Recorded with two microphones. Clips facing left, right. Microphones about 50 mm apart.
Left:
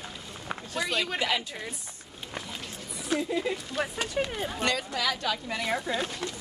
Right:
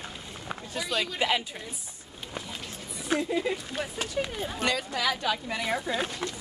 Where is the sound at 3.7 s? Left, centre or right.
Left.